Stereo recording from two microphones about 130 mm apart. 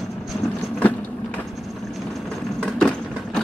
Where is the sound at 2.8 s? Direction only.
5° left (ahead or behind).